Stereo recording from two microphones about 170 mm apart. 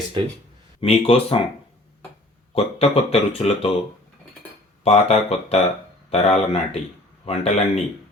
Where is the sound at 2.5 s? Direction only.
35° left (ahead or behind).